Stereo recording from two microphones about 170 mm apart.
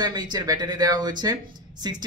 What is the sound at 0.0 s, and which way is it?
Speech, 25° right (ahead or behind).